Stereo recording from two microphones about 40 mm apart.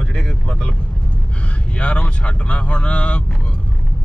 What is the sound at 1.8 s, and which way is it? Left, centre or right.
Speech, left.